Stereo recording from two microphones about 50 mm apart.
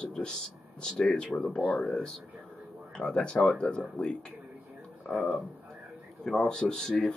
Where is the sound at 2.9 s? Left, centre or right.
Centre.